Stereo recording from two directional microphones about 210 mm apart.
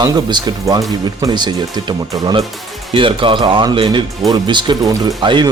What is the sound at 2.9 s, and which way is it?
A man's voice, 25° right (ahead or behind).